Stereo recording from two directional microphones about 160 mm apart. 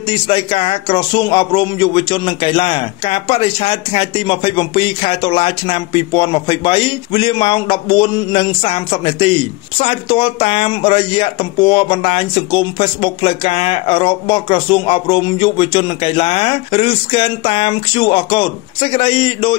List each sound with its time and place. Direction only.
0.1 s a man's voice: 35° left (ahead or behind)